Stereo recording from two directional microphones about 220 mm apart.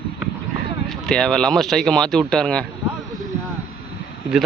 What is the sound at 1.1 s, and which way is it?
Speech, 5° left (ahead or behind).